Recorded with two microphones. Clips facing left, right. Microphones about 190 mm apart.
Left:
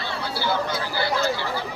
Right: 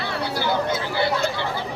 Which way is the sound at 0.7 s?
25° right (ahead or behind).